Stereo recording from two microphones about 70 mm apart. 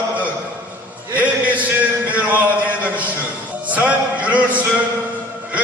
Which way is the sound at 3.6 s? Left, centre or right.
Right.